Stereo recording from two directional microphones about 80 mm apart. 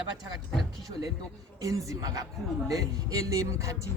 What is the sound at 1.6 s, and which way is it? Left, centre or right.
Speech, right.